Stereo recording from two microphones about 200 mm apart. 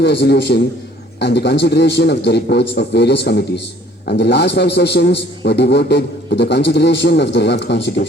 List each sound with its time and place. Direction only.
0.0 s a man's voice: 55° left (ahead or behind)